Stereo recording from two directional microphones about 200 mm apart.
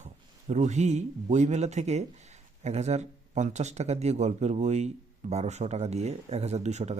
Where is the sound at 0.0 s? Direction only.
35° right (ahead or behind).